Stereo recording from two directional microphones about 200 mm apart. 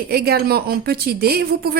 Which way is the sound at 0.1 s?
50° right (ahead or behind).